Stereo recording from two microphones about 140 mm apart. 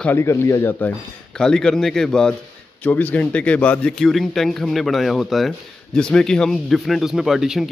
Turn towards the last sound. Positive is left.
turn(degrees=0)  # may be behind; listen again after turning